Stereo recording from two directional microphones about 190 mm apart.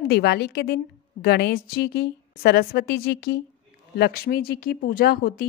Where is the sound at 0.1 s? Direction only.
60° left (ahead or behind).